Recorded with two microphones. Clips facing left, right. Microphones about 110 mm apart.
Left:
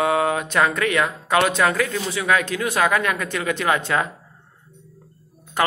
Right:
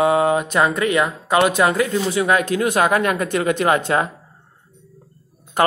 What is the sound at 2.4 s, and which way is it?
Speech, 45° right (ahead or behind).